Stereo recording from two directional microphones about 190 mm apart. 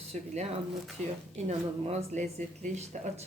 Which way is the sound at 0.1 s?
35° right (ahead or behind).